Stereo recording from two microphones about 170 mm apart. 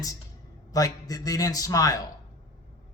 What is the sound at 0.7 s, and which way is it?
A man's voice, 20° left (ahead or behind).